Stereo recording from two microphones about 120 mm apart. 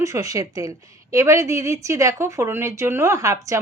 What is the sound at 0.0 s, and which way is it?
A woman's voice, 25° right (ahead or behind).